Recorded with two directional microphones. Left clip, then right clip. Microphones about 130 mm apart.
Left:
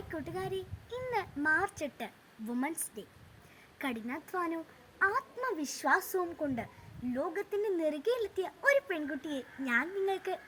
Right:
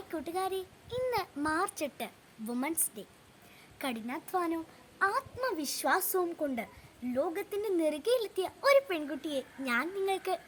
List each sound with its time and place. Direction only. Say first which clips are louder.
0.1 s a woman's voice: right 4 dB; 15° right (ahead or behind)